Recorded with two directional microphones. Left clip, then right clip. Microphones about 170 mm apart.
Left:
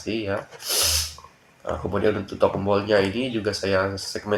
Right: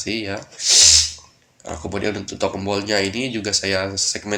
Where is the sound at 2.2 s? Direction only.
25° right (ahead or behind).